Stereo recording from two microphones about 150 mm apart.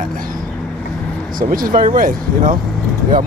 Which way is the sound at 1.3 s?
70° right (ahead or behind).